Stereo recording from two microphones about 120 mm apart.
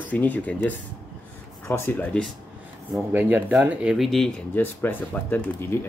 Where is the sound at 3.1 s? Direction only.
15° right (ahead or behind).